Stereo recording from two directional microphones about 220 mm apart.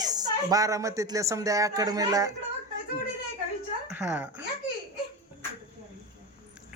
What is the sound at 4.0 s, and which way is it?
Speech, 10° right (ahead or behind).